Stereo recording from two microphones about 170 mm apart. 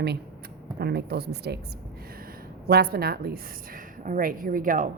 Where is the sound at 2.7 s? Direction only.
65° right (ahead or behind).